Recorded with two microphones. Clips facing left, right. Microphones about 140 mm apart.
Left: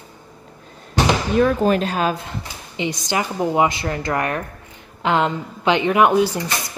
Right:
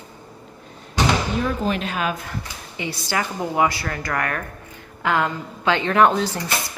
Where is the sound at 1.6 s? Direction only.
40° left (ahead or behind); by 6.5 s 10° left (ahead or behind).